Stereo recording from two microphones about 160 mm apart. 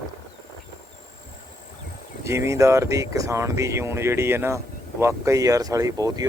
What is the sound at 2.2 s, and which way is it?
Speech, 15° right (ahead or behind).